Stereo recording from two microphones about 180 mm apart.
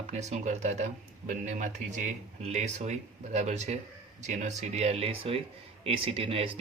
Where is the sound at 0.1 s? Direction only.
40° right (ahead or behind).